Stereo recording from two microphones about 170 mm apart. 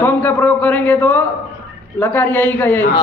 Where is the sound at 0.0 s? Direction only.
10° left (ahead or behind).